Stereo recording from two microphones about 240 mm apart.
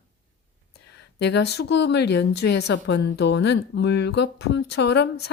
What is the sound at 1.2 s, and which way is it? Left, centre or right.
A woman's voice, left.